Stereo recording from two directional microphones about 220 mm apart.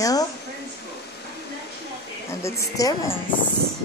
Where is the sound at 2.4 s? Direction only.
15° left (ahead or behind).